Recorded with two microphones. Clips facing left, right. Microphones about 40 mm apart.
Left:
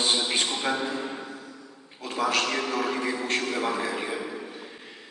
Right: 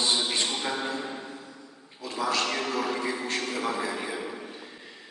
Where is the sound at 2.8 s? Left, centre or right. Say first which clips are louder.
Left 2 dB; left.